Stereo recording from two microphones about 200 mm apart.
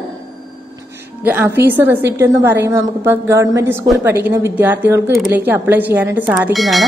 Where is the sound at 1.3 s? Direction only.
10° right (ahead or behind).